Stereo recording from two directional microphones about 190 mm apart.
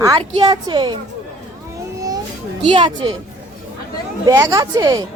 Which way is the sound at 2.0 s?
20° right (ahead or behind).